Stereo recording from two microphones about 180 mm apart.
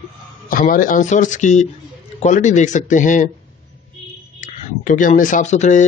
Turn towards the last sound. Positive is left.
turn(degrees=40)  # may be behind; listen again after turning